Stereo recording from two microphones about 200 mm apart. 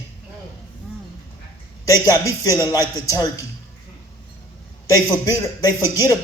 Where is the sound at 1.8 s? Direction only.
15° left (ahead or behind).